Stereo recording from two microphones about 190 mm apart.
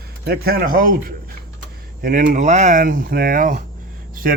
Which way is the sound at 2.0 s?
50° right (ahead or behind).